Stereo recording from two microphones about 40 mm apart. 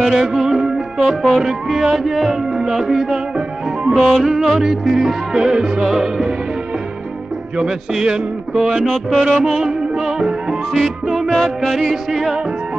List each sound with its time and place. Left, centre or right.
0.0 s music: centre
8.0 s music: centre
8.8 s music: centre
9.4 s music: centre